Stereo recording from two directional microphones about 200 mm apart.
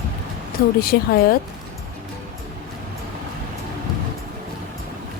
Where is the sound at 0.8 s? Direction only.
50° left (ahead or behind).